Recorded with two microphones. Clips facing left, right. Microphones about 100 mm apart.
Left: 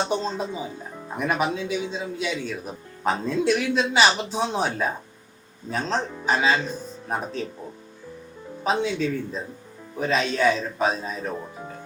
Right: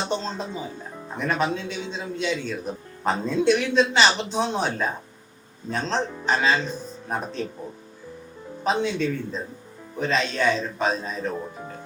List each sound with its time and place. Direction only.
0.1 s a man's voice: 10° left (ahead or behind)
8.6 s a man's voice: centre (ahead or behind)